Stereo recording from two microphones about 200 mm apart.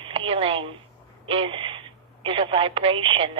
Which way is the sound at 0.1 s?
25° right (ahead or behind).